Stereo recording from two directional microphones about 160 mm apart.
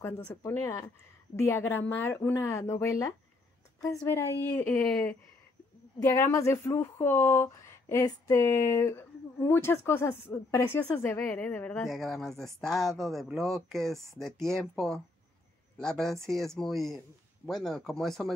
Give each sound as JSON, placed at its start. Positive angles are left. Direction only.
{"t": 0.0, "sound": "a woman's voice", "side_deg": 15}